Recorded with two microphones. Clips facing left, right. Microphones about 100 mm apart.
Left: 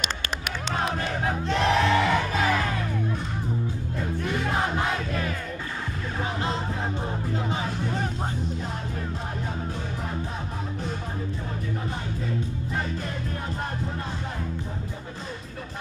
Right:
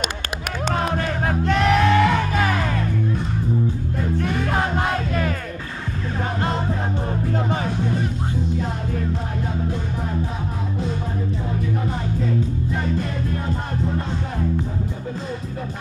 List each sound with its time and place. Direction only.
0.9 s music: 55° right (ahead or behind)